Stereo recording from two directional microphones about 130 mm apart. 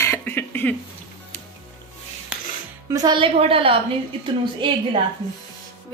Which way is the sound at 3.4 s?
45° right (ahead or behind).